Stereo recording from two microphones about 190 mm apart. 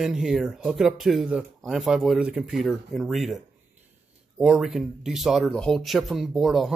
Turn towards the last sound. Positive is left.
turn(degrees=0)  # may be behind; listen again after turning